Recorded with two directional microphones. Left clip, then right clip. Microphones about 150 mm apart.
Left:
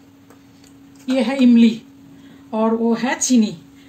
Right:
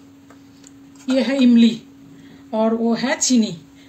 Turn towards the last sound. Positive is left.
turn(degrees=25)  # may be behind; listen again after turning